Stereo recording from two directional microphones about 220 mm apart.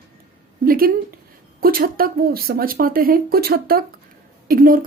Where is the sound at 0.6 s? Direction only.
40° right (ahead or behind).